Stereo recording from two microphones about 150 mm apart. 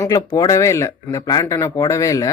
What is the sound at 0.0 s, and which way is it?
Speech, 25° left (ahead or behind).